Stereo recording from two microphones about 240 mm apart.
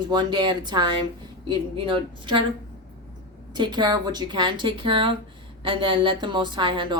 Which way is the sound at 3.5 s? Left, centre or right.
Centre.